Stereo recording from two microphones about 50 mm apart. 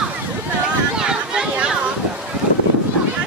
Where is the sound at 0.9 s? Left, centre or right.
Centre.